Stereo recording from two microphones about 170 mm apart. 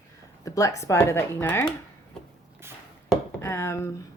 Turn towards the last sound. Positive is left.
turn(degrees=15)  # may be behind; listen again after turning